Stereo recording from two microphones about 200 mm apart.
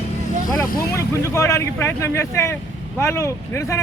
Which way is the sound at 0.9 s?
15° left (ahead or behind).